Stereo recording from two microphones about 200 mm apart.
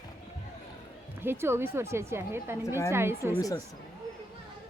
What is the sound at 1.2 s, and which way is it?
Speech, 10° right (ahead or behind).